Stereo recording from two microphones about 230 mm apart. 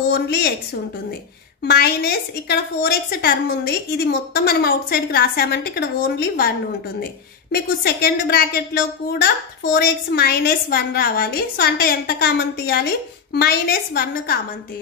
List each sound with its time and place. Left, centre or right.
0.1 s a woman's voice: left
1.6 s a woman's voice: left
7.5 s a woman's voice: left